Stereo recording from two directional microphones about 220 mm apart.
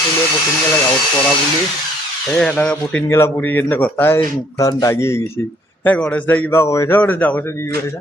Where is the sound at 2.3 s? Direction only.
5° left (ahead or behind).